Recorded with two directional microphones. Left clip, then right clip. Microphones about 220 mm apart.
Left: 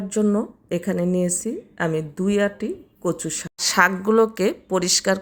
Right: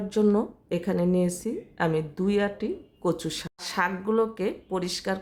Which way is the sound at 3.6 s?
20° left (ahead or behind).